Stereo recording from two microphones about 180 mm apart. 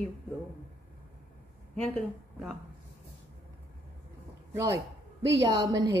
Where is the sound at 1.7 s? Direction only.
5° left (ahead or behind).